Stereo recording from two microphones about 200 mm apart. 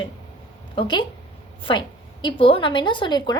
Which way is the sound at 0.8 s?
25° left (ahead or behind).